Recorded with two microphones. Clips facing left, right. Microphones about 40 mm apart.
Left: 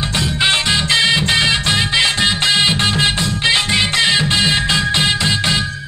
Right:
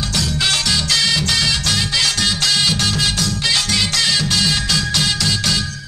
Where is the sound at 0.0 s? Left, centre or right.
Left.